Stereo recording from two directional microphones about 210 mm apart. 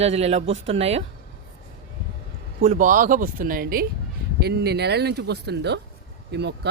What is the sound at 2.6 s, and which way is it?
Speech, 35° right (ahead or behind).